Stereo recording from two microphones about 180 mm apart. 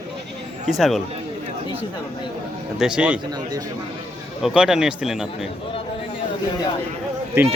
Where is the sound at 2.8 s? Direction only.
5° right (ahead or behind).